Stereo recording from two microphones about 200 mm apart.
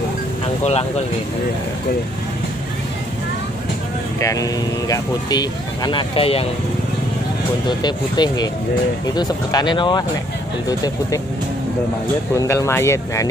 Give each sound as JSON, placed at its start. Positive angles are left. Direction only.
{"t": 0.7, "sound": "speech", "side_deg": 30}
{"t": 4.2, "sound": "speech", "side_deg": 15}
{"t": 7.6, "sound": "speech", "side_deg": 20}
{"t": 12.4, "sound": "speech", "side_deg": 15}